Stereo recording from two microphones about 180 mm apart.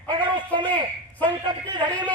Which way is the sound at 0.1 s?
25° right (ahead or behind).